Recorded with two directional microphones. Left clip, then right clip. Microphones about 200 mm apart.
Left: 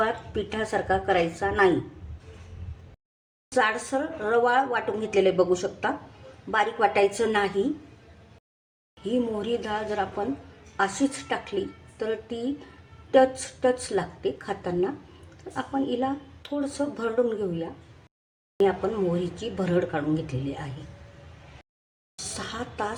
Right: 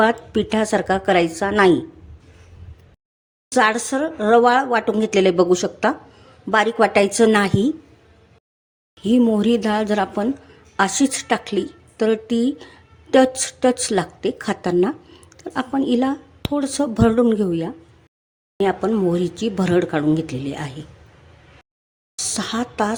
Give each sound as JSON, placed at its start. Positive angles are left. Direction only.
{"t": 0.0, "sound": "speech", "side_deg": -55}
{"t": 3.5, "sound": "speech", "side_deg": -50}
{"t": 9.0, "sound": "a woman's voice", "side_deg": -50}
{"t": 22.2, "sound": "a sound", "side_deg": -50}